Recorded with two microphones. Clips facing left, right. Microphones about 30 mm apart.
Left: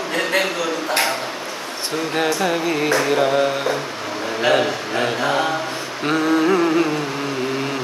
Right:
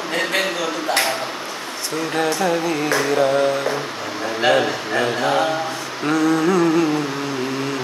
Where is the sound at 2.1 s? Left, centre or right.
Left.